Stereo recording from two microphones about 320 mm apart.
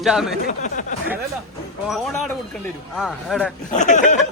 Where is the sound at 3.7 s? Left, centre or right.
Left.